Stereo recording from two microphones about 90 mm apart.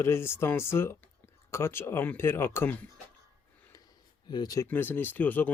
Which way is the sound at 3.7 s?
50° left (ahead or behind).